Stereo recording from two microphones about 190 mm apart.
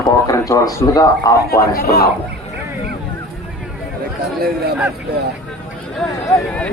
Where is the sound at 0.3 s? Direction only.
15° left (ahead or behind).